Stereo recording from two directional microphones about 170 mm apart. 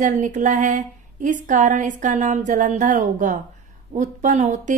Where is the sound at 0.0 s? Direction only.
45° right (ahead or behind).